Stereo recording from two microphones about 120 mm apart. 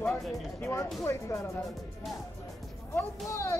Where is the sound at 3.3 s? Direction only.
20° left (ahead or behind).